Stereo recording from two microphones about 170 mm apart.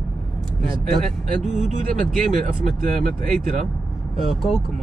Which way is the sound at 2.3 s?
50° right (ahead or behind).